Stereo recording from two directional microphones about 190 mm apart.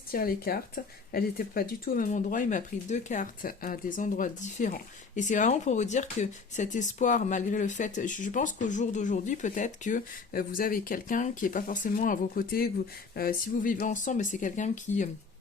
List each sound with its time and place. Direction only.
0.1 s speech: 50° left (ahead or behind)